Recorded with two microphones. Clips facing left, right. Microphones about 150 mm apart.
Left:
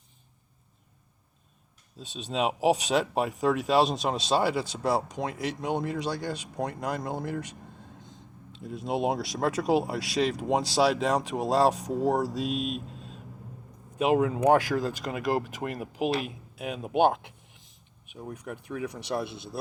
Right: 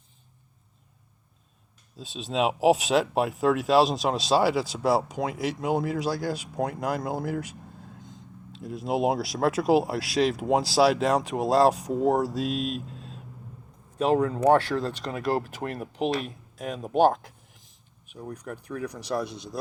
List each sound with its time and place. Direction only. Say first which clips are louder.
2.0 s speech: right 3 dB; centre (ahead or behind)
8.5 s speech: right 3 dB; centre (ahead or behind)
18.2 s speech: right 1 dB; 5° left (ahead or behind)